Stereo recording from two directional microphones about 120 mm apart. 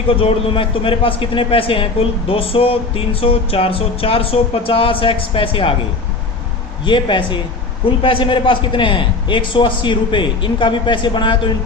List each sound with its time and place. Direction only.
0.1 s a man's voice: 50° left (ahead or behind)
6.8 s a man's voice: 40° left (ahead or behind)